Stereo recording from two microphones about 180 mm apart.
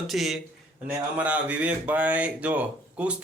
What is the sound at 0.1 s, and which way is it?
Speech, centre (ahead or behind).